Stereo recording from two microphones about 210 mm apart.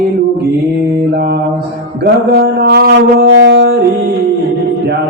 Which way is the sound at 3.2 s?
55° right (ahead or behind).